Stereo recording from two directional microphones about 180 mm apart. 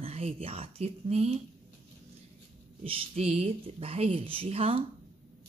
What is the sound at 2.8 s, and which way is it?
Speech, 30° right (ahead or behind).